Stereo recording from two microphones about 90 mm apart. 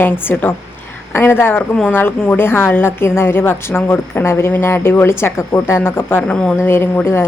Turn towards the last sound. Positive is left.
turn(degrees=30)  # may be behind; listen again after turning